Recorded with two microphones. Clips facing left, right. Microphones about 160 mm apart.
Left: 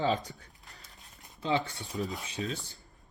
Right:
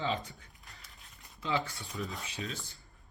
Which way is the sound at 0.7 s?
40° left (ahead or behind).